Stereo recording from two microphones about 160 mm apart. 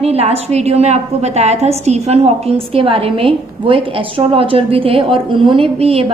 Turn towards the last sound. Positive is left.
turn(degrees=-40)  # may be behind; listen again after turning